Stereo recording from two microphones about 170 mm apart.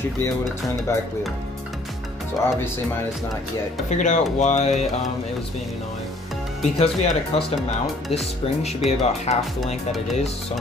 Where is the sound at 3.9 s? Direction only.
45° left (ahead or behind).